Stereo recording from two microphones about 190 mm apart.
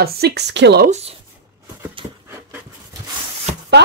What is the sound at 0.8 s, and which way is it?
Speech, 35° right (ahead or behind).